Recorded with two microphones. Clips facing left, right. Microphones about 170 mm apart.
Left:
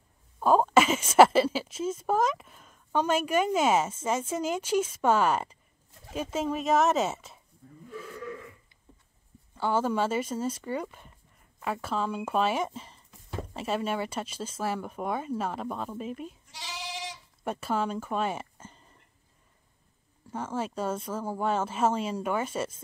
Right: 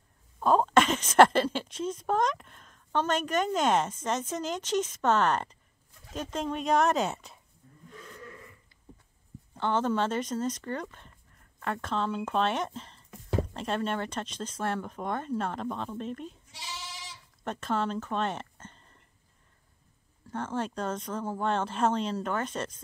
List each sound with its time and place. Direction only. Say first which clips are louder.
0.4 s a woman's voice: left 1 dB; 5° left (ahead or behind)
9.6 s a woman's voice: left 1 dB; 10° left (ahead or behind)
13.1 s a sound: right 7 dB; 80° right
13.5 s a woman's voice: left 1 dB; 5° left (ahead or behind)
17.4 s speech: left 1 dB; 10° left (ahead or behind)
20.2 s a woman's voice: even; 10° left (ahead or behind)